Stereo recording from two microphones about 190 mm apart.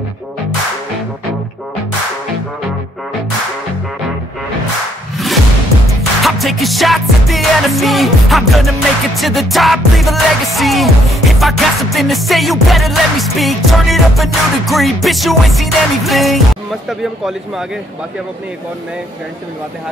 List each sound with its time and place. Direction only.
5.1 s music: centre (ahead or behind)